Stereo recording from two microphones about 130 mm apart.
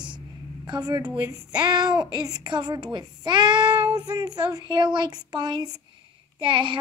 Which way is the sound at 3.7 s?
10° right (ahead or behind).